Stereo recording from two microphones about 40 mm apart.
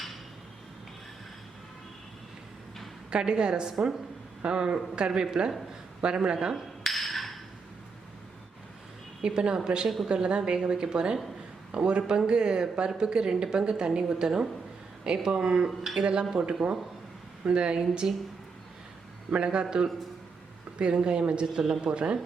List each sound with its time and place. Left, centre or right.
3.1 s a woman's voice: right
6.8 s wood block: centre
9.2 s a woman's voice: right
19.3 s a woman's voice: right
20.7 s a woman's voice: right